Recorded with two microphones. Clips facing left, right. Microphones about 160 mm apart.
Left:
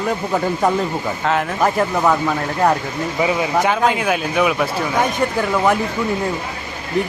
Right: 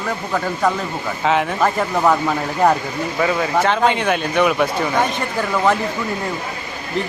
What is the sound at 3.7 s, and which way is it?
A man's voice, 5° left (ahead or behind).